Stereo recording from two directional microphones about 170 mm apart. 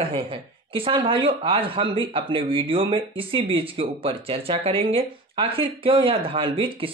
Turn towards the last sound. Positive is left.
turn(degrees=-30)  # may be behind; listen again after turning